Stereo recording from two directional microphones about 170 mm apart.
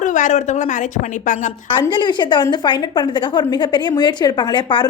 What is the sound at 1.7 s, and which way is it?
A woman's voice, 25° left (ahead or behind).